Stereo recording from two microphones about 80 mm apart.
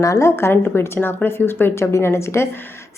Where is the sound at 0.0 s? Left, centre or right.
Left.